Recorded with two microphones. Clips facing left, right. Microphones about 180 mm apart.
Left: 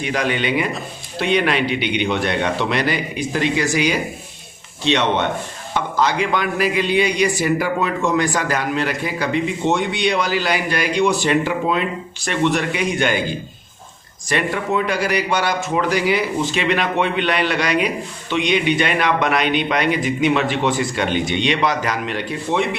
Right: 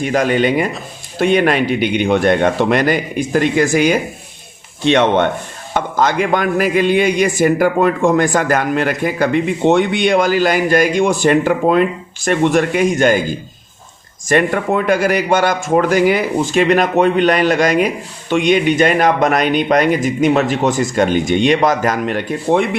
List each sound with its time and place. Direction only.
0.0 s a man's voice: 45° right (ahead or behind)